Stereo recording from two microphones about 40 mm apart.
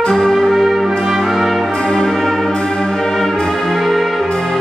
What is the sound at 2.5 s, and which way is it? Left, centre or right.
Music, centre.